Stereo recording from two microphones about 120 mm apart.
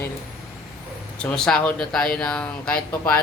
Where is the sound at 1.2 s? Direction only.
5° left (ahead or behind).